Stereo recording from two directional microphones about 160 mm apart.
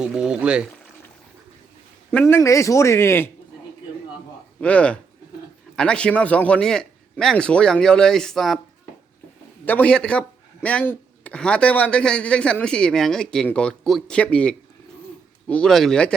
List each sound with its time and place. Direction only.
0.0 s a man's voice: 5° right (ahead or behind)
2.1 s speech: 15° left (ahead or behind)
4.6 s a man's voice: 5° left (ahead or behind)
9.6 s a man's voice: 10° left (ahead or behind)